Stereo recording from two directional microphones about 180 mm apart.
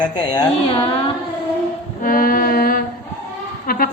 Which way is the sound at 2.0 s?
50° left (ahead or behind).